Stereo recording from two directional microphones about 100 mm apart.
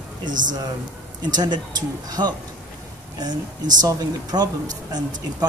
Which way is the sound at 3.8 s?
40° right (ahead or behind).